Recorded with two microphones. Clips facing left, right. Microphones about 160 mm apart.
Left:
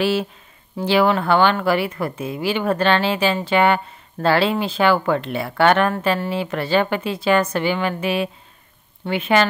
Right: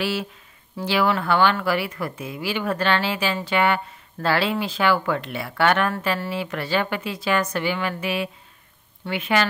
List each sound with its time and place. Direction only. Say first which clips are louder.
0.0 s speech: left 6 dB; 25° left (ahead or behind)